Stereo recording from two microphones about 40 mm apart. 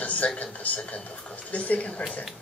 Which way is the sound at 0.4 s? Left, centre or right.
Left.